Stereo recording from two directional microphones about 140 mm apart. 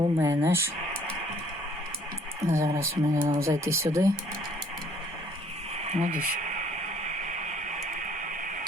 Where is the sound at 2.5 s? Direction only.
20° right (ahead or behind).